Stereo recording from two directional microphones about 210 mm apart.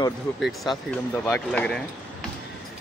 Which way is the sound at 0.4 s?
Centre (ahead or behind).